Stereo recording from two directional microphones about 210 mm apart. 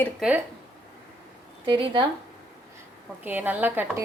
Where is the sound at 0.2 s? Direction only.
5° right (ahead or behind).